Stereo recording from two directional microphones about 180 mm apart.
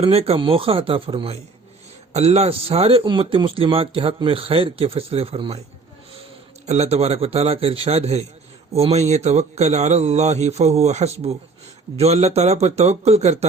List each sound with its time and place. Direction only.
0.0 s speech: 30° right (ahead or behind)
6.7 s speech: 35° right (ahead or behind)